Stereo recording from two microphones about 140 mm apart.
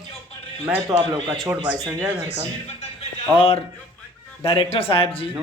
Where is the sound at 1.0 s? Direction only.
35° right (ahead or behind).